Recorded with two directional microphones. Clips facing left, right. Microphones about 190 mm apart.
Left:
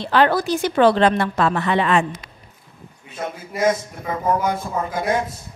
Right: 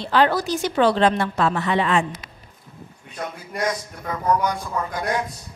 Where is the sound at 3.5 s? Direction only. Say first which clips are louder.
Left 6 dB; 5° left (ahead or behind).